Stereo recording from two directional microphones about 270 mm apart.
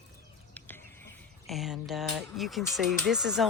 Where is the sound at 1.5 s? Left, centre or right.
Centre.